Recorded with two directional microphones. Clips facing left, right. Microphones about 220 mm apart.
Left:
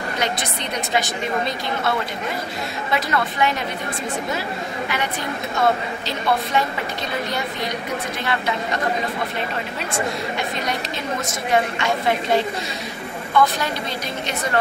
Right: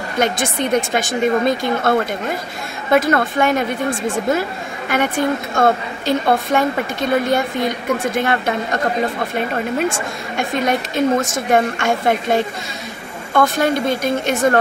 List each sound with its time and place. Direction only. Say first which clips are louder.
0.2 s a woman's voice: right 10 dB; 50° right (ahead or behind)
4.8 s a woman's voice: right 11 dB; 50° right (ahead or behind)
9.8 s a woman's voice: right 4 dB; 50° right (ahead or behind)